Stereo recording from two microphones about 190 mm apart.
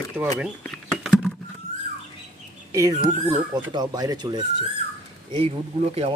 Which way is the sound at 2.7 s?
20° right (ahead or behind).